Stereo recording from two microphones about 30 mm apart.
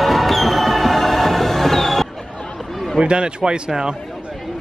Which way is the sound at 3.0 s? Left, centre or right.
Right.